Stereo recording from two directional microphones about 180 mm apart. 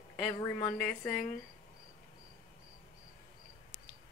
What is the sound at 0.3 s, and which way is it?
Speech, 20° left (ahead or behind).